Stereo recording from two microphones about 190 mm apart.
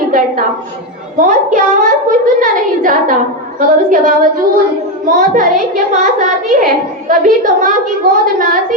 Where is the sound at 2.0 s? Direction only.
45° right (ahead or behind).